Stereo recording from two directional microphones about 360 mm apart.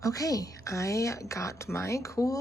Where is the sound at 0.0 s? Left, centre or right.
Centre.